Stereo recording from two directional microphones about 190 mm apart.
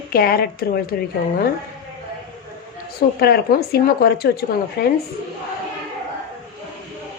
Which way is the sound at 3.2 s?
55° left (ahead or behind).